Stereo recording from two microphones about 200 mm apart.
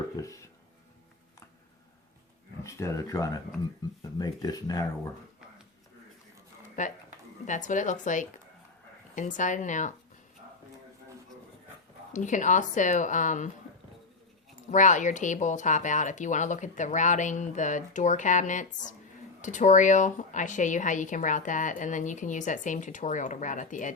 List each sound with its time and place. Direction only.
0.2 s speech: 15° left (ahead or behind)
2.6 s speech: 15° left (ahead or behind)
6.8 s speech: 40° left (ahead or behind)
12.1 s speech: 40° left (ahead or behind)
14.7 s speech: 40° left (ahead or behind)